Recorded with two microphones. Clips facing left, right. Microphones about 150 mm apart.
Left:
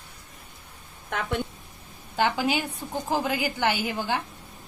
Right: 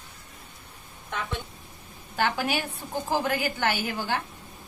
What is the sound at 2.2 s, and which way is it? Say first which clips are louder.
A woman's voice: left 2 dB; 15° left (ahead or behind).